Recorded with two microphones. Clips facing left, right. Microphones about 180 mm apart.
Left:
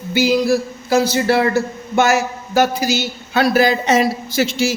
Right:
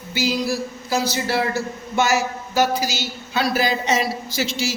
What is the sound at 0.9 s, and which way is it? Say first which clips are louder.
A man's voice: left 8 dB; 55° left (ahead or behind).